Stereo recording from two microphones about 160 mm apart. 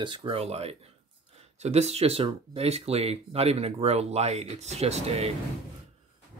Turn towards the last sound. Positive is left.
turn(degrees=-40)  # may be behind; listen again after turning